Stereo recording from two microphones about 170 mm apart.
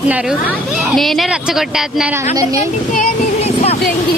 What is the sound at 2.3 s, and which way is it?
Speech, 20° right (ahead or behind).